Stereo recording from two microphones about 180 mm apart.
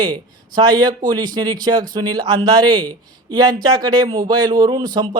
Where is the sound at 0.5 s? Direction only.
20° right (ahead or behind).